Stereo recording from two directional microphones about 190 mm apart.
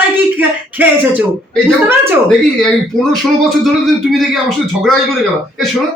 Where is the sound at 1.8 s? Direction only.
10° right (ahead or behind).